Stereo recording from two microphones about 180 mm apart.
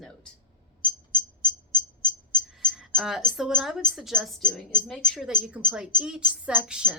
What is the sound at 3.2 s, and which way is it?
A woman's voice, centre (ahead or behind).